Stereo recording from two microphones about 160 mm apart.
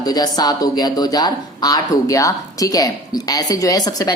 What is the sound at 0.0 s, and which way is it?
Speech, 25° left (ahead or behind).